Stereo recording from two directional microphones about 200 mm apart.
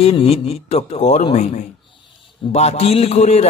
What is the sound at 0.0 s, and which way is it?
A man's voice, 30° left (ahead or behind).